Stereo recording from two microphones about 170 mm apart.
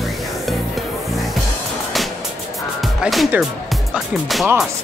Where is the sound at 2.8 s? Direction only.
Centre (ahead or behind).